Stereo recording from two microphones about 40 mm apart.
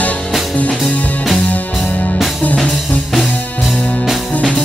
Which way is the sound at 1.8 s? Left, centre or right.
Left.